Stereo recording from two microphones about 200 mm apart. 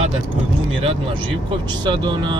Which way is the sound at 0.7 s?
25° right (ahead or behind).